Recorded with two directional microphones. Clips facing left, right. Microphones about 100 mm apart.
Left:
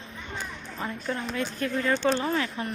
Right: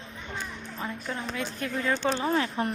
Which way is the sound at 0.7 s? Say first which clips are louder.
Left 3 dB; 5° right (ahead or behind).